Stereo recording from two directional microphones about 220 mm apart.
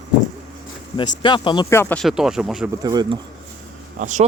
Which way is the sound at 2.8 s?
15° right (ahead or behind).